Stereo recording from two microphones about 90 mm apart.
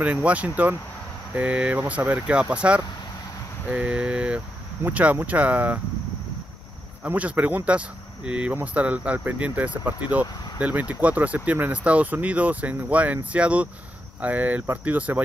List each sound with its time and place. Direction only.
0.0 s speech: 15° right (ahead or behind)
3.6 s vehicle: 15° right (ahead or behind)
4.8 s speech: 20° right (ahead or behind)
7.0 s speech: 15° right (ahead or behind)